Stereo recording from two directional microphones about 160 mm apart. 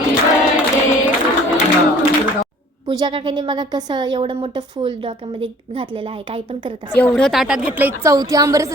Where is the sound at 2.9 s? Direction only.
30° right (ahead or behind).